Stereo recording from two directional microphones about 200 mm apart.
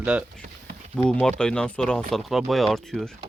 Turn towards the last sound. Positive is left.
turn(degrees=0)  # may be behind; listen again after turning